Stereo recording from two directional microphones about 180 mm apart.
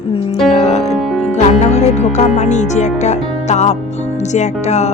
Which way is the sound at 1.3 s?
40° left (ahead or behind).